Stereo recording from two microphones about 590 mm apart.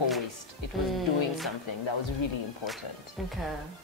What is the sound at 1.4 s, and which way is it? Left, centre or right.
Speech, left.